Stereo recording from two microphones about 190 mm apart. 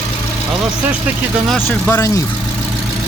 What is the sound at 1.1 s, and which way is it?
Speech, 10° right (ahead or behind).